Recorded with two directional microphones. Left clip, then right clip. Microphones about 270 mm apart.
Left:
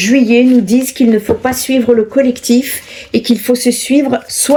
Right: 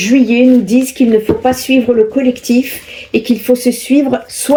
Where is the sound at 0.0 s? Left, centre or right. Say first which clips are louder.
Even; left.